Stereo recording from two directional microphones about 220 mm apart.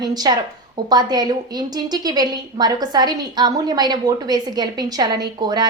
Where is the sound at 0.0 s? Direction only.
20° right (ahead or behind).